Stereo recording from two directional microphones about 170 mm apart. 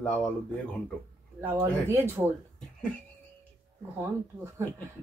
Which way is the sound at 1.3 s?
15° right (ahead or behind).